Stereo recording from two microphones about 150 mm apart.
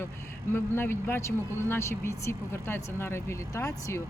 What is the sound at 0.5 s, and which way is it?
Speech, 15° left (ahead or behind).